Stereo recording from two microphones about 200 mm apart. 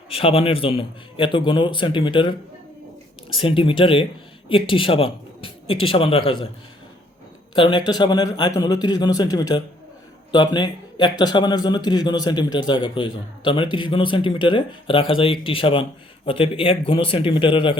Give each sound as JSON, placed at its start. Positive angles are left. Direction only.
{"t": 0.1, "sound": "a man's voice", "side_deg": 30}
{"t": 3.4, "sound": "a man's voice", "side_deg": 25}
{"t": 7.5, "sound": "a man's voice", "side_deg": 25}